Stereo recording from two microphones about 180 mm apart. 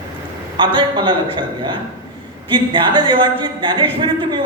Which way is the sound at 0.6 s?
25° right (ahead or behind).